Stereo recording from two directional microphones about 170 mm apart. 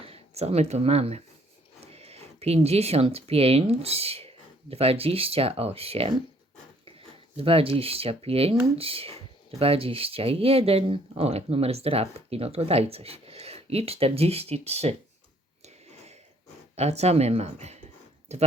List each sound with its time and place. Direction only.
0.0 s speech: 35° right (ahead or behind)
7.3 s speech: 35° right (ahead or behind)
15.6 s a sound: 40° right (ahead or behind)
16.7 s speech: 40° right (ahead or behind)